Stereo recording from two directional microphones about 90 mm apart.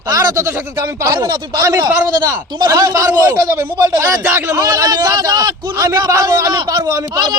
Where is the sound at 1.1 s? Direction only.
45° right (ahead or behind).